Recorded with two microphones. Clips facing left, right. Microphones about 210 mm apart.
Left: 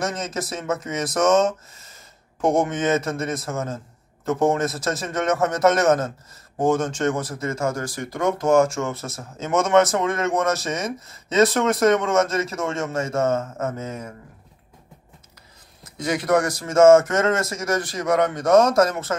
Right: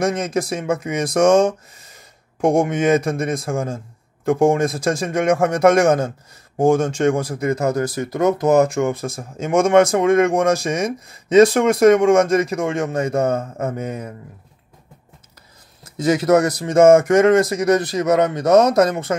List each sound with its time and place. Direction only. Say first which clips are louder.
0.0 s speech: right 7 dB; 10° right (ahead or behind)
15.8 s speech: right 7 dB; 25° right (ahead or behind)